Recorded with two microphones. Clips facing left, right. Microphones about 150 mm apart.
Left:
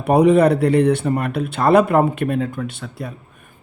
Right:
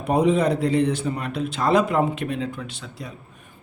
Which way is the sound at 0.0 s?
65° left (ahead or behind).